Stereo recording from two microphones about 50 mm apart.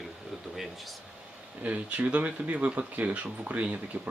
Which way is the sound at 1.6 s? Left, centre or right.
Right.